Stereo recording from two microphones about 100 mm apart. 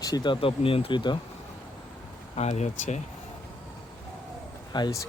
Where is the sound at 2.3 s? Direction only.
90° left.